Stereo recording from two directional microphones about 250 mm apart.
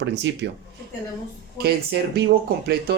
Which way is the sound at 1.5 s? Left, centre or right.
Right.